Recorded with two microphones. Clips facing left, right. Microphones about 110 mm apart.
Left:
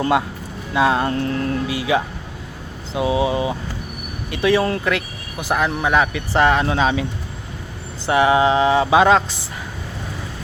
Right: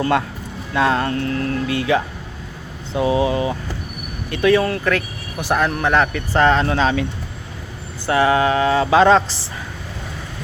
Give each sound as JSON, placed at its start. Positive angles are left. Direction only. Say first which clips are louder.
{"t": 0.0, "sound": "speech", "louder": "even", "side_deg": 15}
{"t": 1.7, "sound": "speech", "louder": "right 1 dB", "side_deg": 10}
{"t": 8.0, "sound": "speech", "louder": "left 1 dB", "side_deg": 15}